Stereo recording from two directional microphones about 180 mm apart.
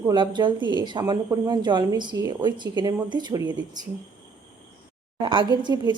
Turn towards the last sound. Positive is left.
turn(degrees=-25)  # may be behind; listen again after turning